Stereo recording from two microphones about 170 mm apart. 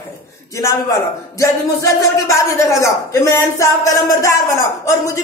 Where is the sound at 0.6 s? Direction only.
20° left (ahead or behind).